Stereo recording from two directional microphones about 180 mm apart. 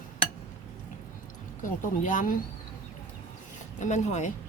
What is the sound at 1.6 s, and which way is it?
Speech, 45° left (ahead or behind).